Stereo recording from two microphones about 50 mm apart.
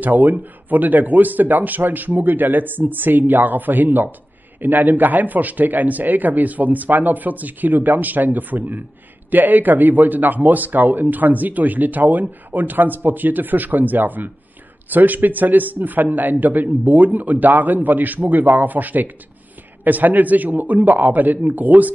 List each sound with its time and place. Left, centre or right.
0.0 s a man's voice: right